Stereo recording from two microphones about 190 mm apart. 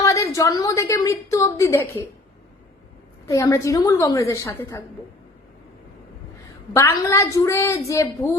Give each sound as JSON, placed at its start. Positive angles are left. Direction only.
{"t": 0.0, "sound": "a woman's voice", "side_deg": 15}
{"t": 3.2, "sound": "a woman's voice", "side_deg": 15}
{"t": 6.7, "sound": "a woman's voice", "side_deg": 15}